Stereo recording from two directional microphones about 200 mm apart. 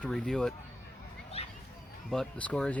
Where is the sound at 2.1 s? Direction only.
5° left (ahead or behind).